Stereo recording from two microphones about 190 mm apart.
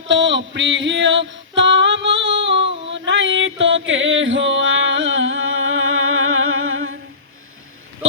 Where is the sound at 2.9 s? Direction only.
75° right (ahead or behind); by 6.9 s 90° right.